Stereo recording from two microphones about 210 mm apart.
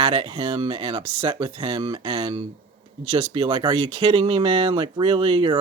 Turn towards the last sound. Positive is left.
turn(degrees=-25)  # may be behind; listen again after turning